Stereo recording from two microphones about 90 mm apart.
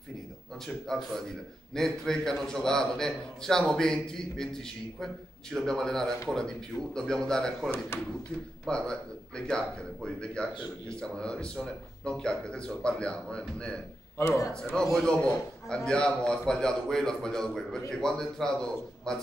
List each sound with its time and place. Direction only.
0.8 s a man's voice: 5° left (ahead or behind)
14.1 s a man's voice: 30° left (ahead or behind)
14.5 s a man's voice: 5° left (ahead or behind)
15.1 s a man's voice: 30° left (ahead or behind)
15.7 s a man's voice: 10° left (ahead or behind)